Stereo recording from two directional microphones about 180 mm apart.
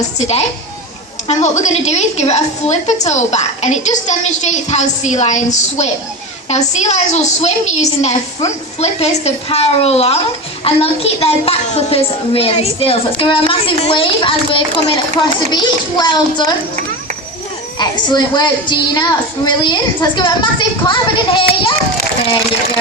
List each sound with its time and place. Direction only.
1.3 s a woman's voice: 40° left (ahead or behind); by 16.5 s 25° left (ahead or behind)
17.7 s a woman's voice: 25° left (ahead or behind)